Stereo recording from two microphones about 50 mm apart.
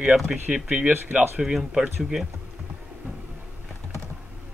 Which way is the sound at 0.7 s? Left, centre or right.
Right.